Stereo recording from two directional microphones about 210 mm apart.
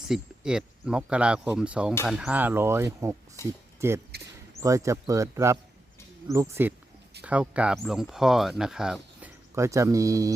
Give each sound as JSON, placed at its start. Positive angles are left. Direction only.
{"t": 0.1, "sound": "speech", "side_deg": -5}
{"t": 3.4, "sound": "speech", "side_deg": 15}
{"t": 3.8, "sound": "speech", "side_deg": -15}
{"t": 9.6, "sound": "speech", "side_deg": -15}